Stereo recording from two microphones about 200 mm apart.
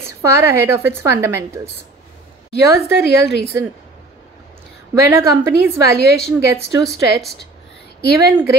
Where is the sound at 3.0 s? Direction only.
55° left (ahead or behind).